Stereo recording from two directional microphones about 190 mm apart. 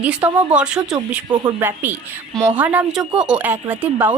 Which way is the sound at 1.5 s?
10° right (ahead or behind).